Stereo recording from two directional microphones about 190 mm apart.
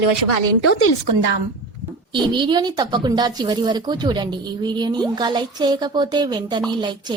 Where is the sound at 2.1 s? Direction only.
25° right (ahead or behind).